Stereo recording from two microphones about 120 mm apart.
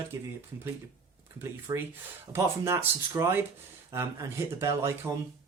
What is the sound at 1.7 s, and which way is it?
Speech, 30° right (ahead or behind).